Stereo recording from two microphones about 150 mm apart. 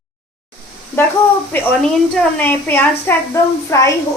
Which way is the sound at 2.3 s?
10° left (ahead or behind).